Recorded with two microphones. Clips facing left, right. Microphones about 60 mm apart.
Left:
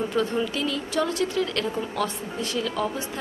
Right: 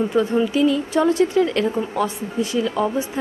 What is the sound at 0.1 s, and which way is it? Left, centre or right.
Speech, centre.